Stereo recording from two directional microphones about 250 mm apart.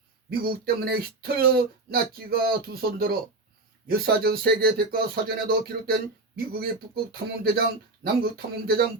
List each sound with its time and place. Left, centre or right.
0.3 s speech: right